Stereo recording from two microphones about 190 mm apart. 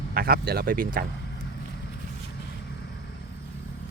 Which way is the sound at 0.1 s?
55° right (ahead or behind).